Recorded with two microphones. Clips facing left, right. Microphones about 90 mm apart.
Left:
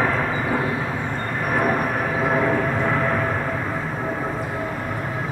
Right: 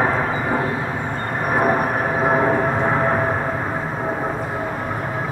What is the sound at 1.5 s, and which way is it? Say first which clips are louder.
Vehicle: right 3 dB; 25° right (ahead or behind).